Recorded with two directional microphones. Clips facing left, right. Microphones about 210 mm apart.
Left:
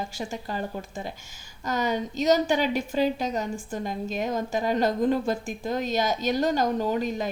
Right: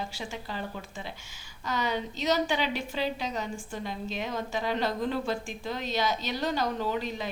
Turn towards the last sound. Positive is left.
turn(degrees=45)  # may be behind; listen again after turning